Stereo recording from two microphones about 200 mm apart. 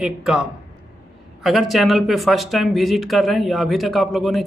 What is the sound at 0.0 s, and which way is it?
Speech, 5° right (ahead or behind).